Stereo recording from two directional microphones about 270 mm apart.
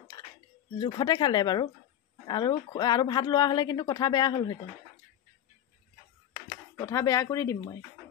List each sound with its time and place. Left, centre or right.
0.2 s a sound: centre
0.7 s speech: centre
6.5 s speech: centre